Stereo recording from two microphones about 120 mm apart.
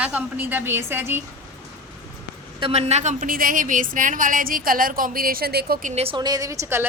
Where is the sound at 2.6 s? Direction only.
65° right (ahead or behind).